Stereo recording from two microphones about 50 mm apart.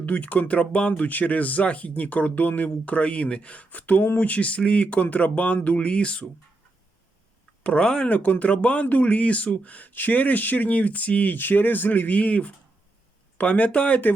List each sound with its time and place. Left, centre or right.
0.0 s speech: left
7.6 s speech: left
8.0 s speech: left